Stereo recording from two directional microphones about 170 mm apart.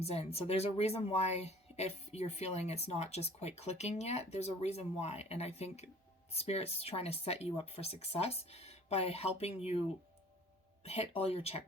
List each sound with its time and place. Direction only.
0.0 s speech: 35° left (ahead or behind)
10.8 s speech: 40° left (ahead or behind)